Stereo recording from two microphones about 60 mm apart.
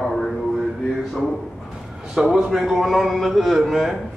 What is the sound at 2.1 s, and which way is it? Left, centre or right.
A man's voice, centre.